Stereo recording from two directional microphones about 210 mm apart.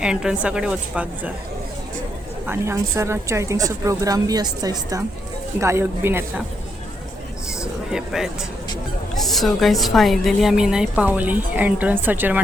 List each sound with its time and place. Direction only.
0.0 s a woman's voice: 5° right (ahead or behind)
2.5 s a woman's voice: 15° right (ahead or behind)
7.9 s a woman's voice: 5° right (ahead or behind)